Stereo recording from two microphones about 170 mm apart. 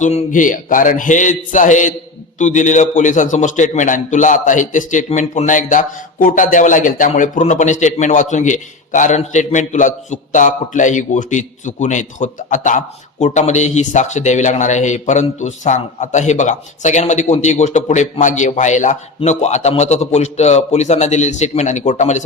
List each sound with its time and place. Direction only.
0.0 s a man's voice: 45° left (ahead or behind)